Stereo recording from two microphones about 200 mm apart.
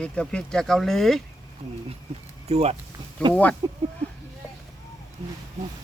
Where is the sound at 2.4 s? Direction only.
30° right (ahead or behind).